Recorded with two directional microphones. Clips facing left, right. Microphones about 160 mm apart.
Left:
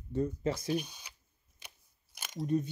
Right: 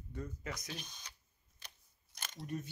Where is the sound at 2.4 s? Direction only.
20° left (ahead or behind).